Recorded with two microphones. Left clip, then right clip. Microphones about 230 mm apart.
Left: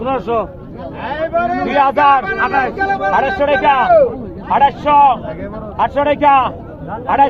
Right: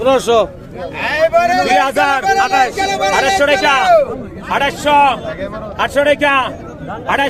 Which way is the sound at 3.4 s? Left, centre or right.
Right.